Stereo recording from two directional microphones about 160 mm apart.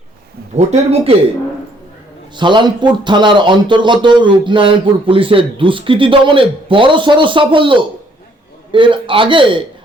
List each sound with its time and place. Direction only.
0.5 s speech: 40° right (ahead or behind)
2.3 s speech: 30° right (ahead or behind)